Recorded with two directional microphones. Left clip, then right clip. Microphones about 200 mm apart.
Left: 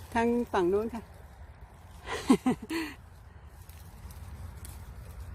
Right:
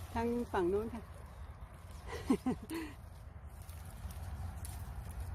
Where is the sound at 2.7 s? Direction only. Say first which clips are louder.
Left 9 dB; 35° left (ahead or behind).